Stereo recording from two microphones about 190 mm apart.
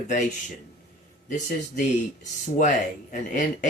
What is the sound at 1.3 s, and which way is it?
Speech, 40° left (ahead or behind).